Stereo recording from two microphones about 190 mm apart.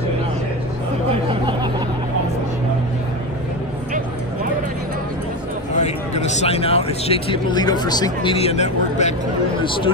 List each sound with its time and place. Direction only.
5.7 s speech: 35° left (ahead or behind)